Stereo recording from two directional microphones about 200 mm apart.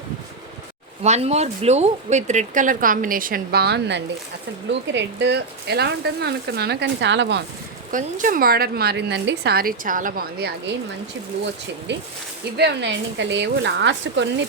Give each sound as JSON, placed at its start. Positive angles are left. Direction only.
{"t": 1.0, "sound": "speech", "side_deg": -35}
{"t": 7.9, "sound": "a woman's voice", "side_deg": -40}
{"t": 11.9, "sound": "speech", "side_deg": -60}